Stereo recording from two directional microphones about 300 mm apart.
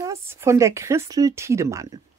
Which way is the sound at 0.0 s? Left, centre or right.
Centre.